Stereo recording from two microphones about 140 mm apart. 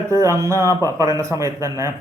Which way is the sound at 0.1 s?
20° right (ahead or behind).